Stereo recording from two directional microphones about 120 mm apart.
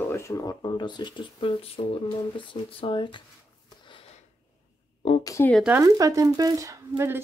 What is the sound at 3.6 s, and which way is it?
Sniff, 40° left (ahead or behind).